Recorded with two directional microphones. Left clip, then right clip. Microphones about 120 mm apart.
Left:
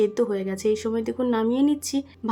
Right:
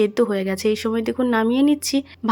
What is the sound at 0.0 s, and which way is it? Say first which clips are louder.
Speech: right 3 dB; 30° right (ahead or behind).